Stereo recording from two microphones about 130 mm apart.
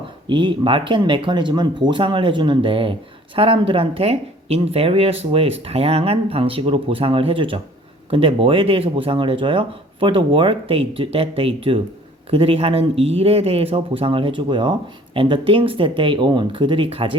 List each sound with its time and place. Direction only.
0.3 s speech: 40° right (ahead or behind)